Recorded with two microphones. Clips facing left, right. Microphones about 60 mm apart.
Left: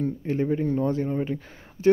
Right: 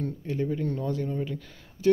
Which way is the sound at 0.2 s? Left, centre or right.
Left.